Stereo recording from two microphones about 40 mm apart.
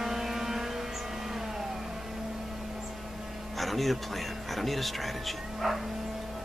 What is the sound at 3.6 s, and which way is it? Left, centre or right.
Music, centre.